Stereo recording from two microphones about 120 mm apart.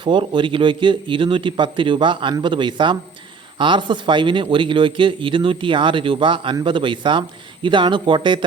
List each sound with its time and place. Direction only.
0.0 s a man's voice: 45° right (ahead or behind)